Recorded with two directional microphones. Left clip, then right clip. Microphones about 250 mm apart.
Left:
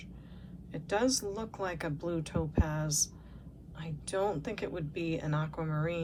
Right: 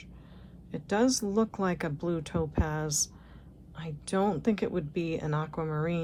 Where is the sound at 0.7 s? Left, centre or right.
Right.